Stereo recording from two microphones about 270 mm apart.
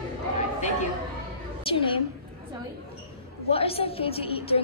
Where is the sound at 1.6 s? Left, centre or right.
Centre.